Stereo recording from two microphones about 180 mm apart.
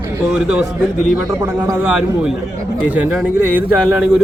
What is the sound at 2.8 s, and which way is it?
Speech, 10° right (ahead or behind).